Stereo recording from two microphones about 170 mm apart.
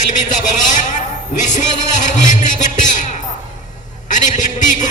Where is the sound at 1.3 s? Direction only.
50° left (ahead or behind).